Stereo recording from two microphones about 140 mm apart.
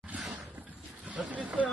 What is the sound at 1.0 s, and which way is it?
Vehicle, 10° right (ahead or behind).